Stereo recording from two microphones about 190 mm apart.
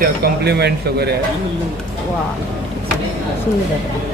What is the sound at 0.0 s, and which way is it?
Speech, 60° right (ahead or behind).